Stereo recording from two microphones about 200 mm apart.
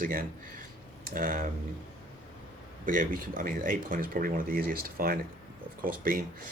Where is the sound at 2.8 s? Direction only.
45° right (ahead or behind).